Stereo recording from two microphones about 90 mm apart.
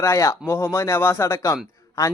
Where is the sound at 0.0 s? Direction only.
35° left (ahead or behind).